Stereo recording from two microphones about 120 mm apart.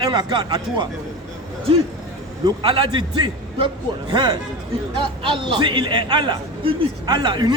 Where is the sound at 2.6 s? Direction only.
40° right (ahead or behind).